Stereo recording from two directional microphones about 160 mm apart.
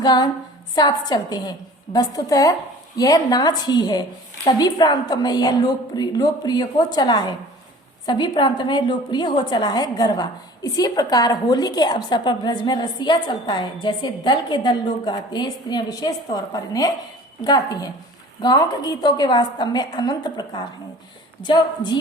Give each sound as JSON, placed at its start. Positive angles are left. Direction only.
{"t": 0.0, "sound": "a woman's voice", "side_deg": 25}